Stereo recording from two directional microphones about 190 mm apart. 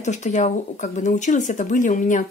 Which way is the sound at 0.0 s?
40° left (ahead or behind).